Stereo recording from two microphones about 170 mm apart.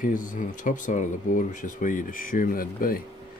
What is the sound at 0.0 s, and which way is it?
Speech, 50° left (ahead or behind).